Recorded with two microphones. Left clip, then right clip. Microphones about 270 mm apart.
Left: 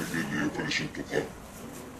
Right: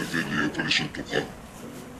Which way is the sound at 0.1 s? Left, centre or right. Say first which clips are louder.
Right 5 dB; right.